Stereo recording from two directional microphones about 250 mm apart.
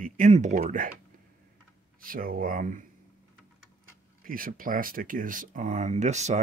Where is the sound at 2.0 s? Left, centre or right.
Right.